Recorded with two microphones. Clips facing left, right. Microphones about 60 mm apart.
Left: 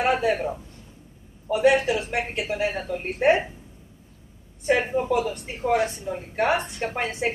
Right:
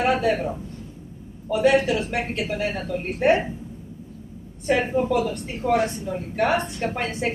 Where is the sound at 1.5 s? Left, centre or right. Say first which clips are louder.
Right 1 dB; left.